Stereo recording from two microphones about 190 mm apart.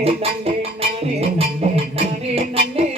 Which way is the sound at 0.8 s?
30° right (ahead or behind).